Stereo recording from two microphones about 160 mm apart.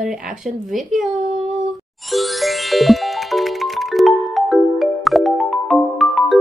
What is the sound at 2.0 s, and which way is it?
Music, centre (ahead or behind).